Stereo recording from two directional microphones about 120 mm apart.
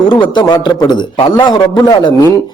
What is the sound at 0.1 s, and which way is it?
A man's voice, 40° left (ahead or behind).